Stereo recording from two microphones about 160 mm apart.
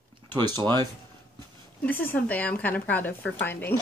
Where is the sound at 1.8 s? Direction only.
10° left (ahead or behind).